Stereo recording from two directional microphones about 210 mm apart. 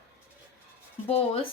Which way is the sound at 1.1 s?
30° left (ahead or behind).